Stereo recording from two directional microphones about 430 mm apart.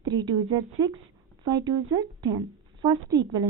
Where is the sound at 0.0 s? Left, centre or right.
Centre.